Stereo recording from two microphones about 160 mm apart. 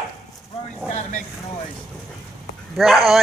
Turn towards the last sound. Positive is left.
turn(degrees=0)  # may be behind; listen again after turning